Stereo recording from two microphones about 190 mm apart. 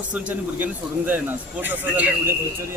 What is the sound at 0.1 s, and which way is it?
Speech, 5° right (ahead or behind).